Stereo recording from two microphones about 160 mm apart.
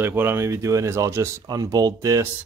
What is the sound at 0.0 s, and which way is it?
Speech, 15° right (ahead or behind).